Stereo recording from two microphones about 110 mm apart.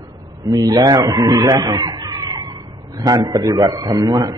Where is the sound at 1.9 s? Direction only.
40° right (ahead or behind).